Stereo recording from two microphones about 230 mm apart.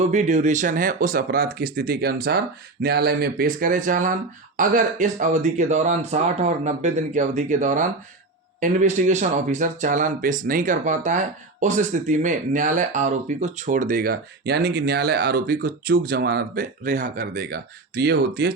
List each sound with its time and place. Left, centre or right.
0.1 s speech: right